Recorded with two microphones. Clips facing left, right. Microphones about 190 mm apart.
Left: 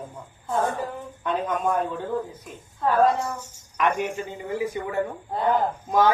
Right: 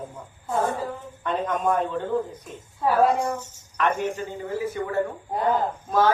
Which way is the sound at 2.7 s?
10° right (ahead or behind).